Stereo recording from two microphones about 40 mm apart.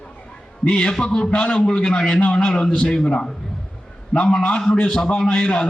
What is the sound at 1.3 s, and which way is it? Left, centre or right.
Speech, left.